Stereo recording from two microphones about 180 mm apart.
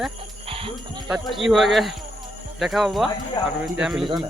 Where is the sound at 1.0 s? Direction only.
Centre (ahead or behind).